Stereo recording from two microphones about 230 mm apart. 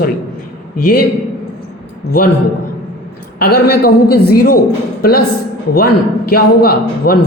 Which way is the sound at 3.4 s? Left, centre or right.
Left.